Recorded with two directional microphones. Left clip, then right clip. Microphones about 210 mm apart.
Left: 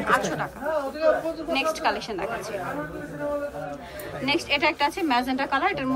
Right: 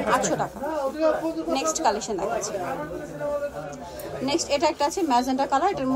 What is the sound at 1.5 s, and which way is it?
A woman's voice, 20° right (ahead or behind).